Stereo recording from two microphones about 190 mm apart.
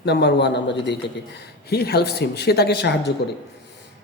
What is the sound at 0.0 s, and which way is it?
A man's voice, 65° left (ahead or behind).